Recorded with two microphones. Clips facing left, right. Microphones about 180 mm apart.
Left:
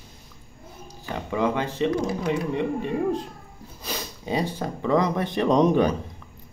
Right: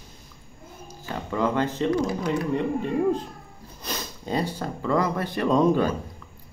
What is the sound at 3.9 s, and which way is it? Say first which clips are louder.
Speech: left 1 dB; 10° left (ahead or behind).